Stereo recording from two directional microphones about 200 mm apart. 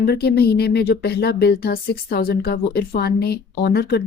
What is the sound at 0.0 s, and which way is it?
Speech, 50° left (ahead or behind).